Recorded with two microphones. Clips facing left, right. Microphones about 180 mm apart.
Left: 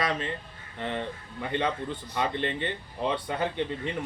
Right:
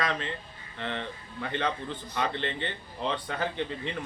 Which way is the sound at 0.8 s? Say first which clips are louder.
Left 3 dB; 15° left (ahead or behind).